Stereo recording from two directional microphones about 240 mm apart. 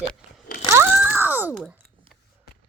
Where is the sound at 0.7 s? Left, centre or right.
Centre.